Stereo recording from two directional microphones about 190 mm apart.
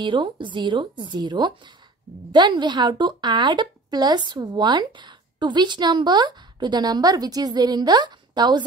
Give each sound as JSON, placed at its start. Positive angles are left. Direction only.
{"t": 0.0, "sound": "a woman's voice", "side_deg": -25}